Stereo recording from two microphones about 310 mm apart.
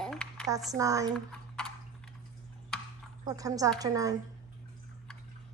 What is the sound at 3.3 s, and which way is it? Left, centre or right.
Speech, centre.